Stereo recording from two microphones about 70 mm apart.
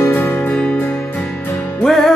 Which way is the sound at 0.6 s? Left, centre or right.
Left.